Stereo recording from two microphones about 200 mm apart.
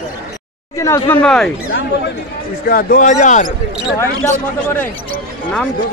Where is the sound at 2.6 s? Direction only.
45° left (ahead or behind).